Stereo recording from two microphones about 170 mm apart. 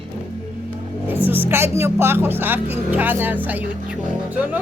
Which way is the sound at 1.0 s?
10° right (ahead or behind).